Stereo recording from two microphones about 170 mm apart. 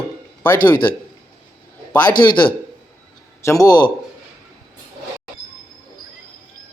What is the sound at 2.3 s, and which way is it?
Speech, 25° left (ahead or behind).